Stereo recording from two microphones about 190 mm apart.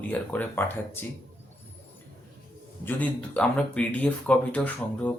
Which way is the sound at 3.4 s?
5° left (ahead or behind).